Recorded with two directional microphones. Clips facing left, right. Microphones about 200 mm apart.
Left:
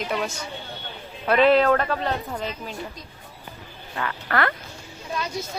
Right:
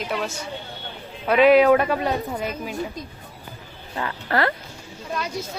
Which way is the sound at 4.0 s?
25° right (ahead or behind).